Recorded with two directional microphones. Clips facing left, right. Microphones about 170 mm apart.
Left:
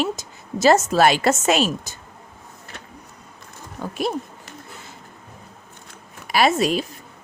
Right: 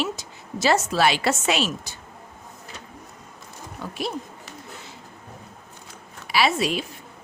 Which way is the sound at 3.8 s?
45° left (ahead or behind).